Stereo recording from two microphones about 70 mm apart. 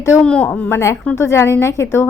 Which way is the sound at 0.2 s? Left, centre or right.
Centre.